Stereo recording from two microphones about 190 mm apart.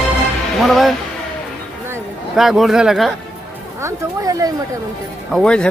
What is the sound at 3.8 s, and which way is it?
Speech, 20° right (ahead or behind).